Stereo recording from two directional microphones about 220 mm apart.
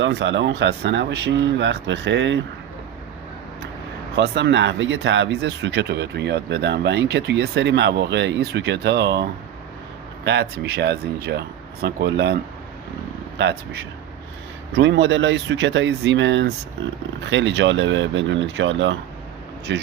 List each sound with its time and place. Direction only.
0.0 s speech: 55° right (ahead or behind)
4.2 s speech: 50° right (ahead or behind)
10.2 s speech: 50° right (ahead or behind)
14.8 s speech: 55° right (ahead or behind)